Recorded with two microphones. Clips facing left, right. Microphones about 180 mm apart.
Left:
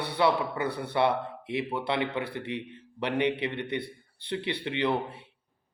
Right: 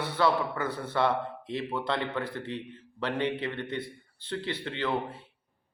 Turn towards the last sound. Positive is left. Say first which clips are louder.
# left 3 dB
turn(degrees=15)  # may be behind; listen again after turning